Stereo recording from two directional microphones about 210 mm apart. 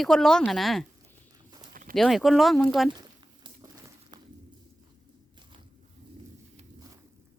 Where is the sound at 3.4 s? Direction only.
20° right (ahead or behind).